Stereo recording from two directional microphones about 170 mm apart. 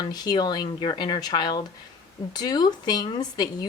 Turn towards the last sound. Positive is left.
turn(degrees=25)  # may be behind; listen again after turning